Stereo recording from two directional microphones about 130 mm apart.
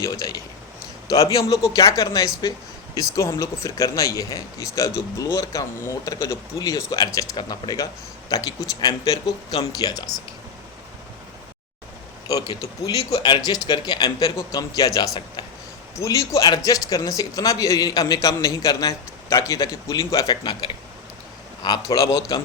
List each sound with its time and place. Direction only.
0.0 s speech: 25° left (ahead or behind)
12.3 s speech: 30° left (ahead or behind)
20.3 s speech: 40° left (ahead or behind)